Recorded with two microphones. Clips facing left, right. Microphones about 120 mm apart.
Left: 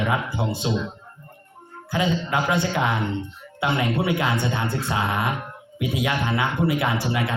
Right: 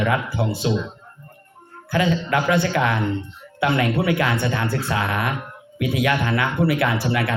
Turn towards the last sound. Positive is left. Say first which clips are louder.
# right 3 dB
turn(degrees=20)  # may be behind; listen again after turning